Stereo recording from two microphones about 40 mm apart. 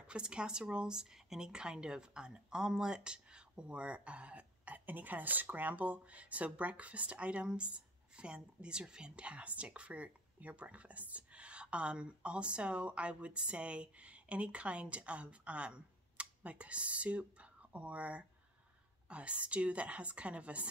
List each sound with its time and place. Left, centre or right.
0.0 s speech: right